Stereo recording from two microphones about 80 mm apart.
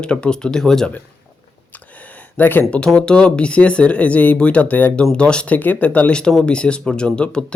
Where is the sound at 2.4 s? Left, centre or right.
Left.